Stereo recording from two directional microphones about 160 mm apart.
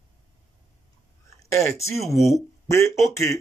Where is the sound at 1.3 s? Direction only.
15° left (ahead or behind).